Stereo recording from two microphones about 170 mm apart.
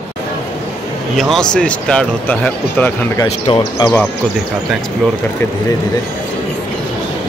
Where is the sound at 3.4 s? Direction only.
25° left (ahead or behind).